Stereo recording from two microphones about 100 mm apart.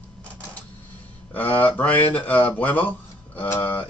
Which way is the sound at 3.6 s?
20° left (ahead or behind).